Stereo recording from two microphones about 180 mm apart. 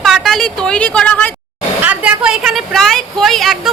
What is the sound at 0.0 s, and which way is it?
A woman's voice, centre (ahead or behind).